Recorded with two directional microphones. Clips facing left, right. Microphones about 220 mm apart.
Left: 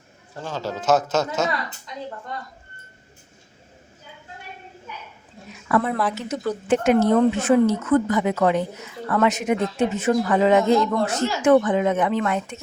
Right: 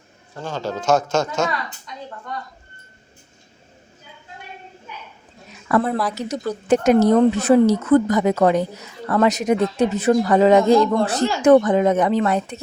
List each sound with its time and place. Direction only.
0.4 s speech: 5° left (ahead or behind)
5.6 s a woman's voice: 40° right (ahead or behind)